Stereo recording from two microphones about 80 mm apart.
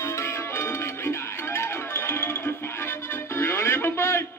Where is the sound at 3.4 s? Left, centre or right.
Left.